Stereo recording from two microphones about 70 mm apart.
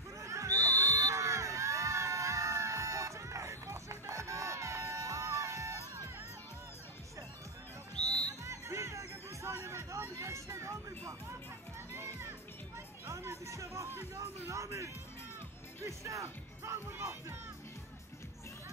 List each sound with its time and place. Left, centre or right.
0.2 s a sound: right
8.0 s music: centre
8.5 s music: right